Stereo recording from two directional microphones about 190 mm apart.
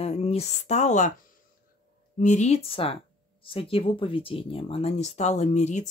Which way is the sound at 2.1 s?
40° left (ahead or behind).